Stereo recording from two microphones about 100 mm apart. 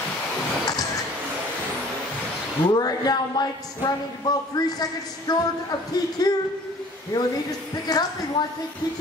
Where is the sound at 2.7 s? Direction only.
40° left (ahead or behind).